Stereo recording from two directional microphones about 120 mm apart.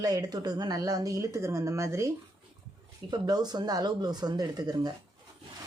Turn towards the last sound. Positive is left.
turn(degrees=-35)  # may be behind; listen again after turning